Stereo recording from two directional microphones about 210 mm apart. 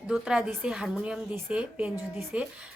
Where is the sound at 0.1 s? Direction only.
5° right (ahead or behind).